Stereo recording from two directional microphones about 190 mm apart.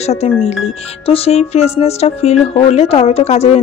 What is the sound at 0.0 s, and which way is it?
Speech, 35° left (ahead or behind).